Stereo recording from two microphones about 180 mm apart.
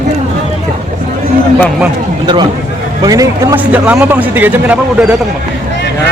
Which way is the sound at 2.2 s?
25° right (ahead or behind).